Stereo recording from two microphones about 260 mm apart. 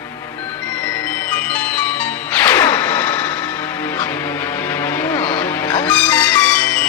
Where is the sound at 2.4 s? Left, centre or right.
Centre.